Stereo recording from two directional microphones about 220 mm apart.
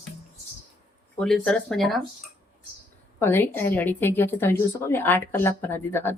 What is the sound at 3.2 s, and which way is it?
Speech, 10° left (ahead or behind).